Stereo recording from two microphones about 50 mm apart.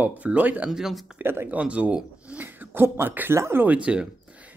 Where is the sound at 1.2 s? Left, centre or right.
Right.